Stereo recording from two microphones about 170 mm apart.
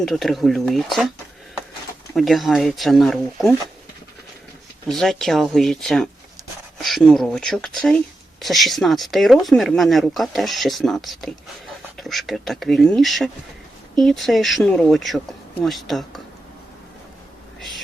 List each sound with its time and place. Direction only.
0.0 s speech: centre (ahead or behind)
2.1 s speech: centre (ahead or behind)
4.9 s speech: centre (ahead or behind)
17.6 s a sound: centre (ahead or behind)